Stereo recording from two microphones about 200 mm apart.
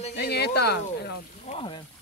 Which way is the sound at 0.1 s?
55° left (ahead or behind).